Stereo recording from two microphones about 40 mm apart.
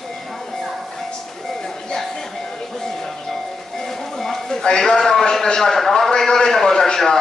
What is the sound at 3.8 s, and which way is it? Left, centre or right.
Music, centre.